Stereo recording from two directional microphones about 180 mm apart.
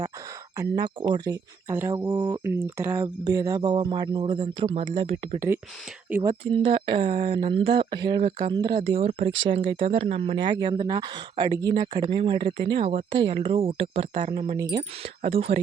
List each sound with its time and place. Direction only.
0.5 s speech: 20° right (ahead or behind)
1.7 s speech: 15° right (ahead or behind); by 5.4 s 30° right (ahead or behind)
6.1 s speech: 15° right (ahead or behind)
6.4 s speech: 30° right (ahead or behind)
15.2 s speech: 35° right (ahead or behind)